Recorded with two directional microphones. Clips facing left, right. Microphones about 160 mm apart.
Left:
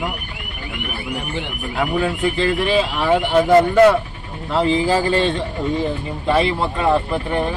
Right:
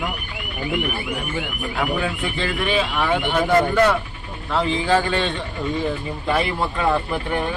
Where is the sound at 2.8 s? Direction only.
30° left (ahead or behind).